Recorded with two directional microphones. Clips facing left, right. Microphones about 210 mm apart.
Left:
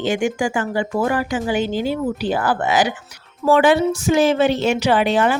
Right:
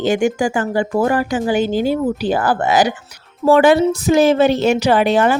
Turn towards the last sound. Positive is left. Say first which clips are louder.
# right 3 dB
turn(degrees=-40)  # may be behind; listen again after turning